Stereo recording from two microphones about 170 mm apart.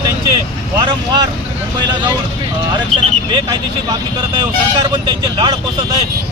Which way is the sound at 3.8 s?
25° right (ahead or behind).